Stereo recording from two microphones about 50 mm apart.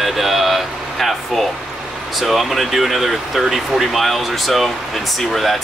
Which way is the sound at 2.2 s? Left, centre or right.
Centre.